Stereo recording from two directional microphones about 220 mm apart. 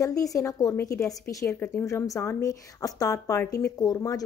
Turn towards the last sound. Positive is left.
turn(degrees=15)  # may be behind; listen again after turning